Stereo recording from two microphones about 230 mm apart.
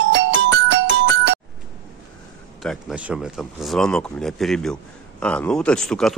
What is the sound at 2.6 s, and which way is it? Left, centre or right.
Speech, centre.